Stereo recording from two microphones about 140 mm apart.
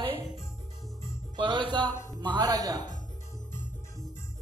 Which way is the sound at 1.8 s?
20° left (ahead or behind).